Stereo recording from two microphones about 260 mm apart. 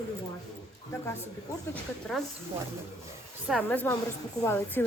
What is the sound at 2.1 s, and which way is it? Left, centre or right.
Speech, centre.